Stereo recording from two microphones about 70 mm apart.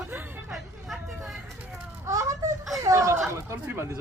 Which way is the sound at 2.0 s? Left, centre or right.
Right.